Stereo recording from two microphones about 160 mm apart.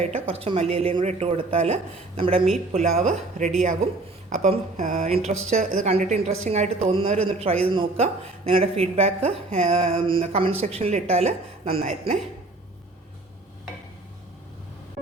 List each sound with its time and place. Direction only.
0.0 s a woman's voice: 40° right (ahead or behind)
6.9 s speech: 35° right (ahead or behind)